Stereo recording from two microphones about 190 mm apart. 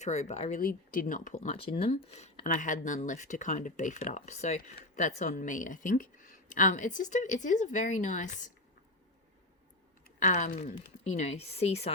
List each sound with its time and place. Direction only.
0.0 s speech: 35° left (ahead or behind)
10.2 s speech: 40° left (ahead or behind)